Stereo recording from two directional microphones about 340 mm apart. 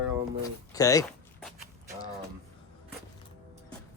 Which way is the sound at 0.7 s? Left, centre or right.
Centre.